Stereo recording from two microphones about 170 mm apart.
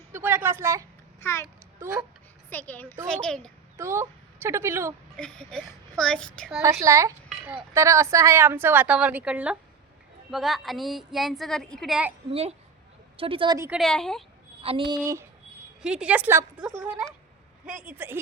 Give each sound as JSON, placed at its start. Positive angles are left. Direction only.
{"t": 0.1, "sound": "a sound", "side_deg": -15}
{"t": 1.2, "sound": "a child's voice", "side_deg": 15}
{"t": 1.8, "sound": "speech", "side_deg": -10}
{"t": 2.5, "sound": "a child's voice", "side_deg": 10}
{"t": 3.8, "sound": "speech", "side_deg": -15}
{"t": 5.1, "sound": "a woman's voice", "side_deg": 5}
{"t": 6.6, "sound": "a woman's voice", "side_deg": -15}
{"t": 12.3, "sound": "speech", "side_deg": -35}
{"t": 13.7, "sound": "a woman's voice", "side_deg": 0}
{"t": 14.6, "sound": "speech", "side_deg": -30}
{"t": 15.0, "sound": "speech", "side_deg": -15}
{"t": 15.8, "sound": "speech", "side_deg": -5}
{"t": 17.7, "sound": "speech", "side_deg": -10}